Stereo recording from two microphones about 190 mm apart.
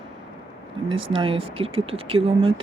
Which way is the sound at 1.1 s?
30° right (ahead or behind).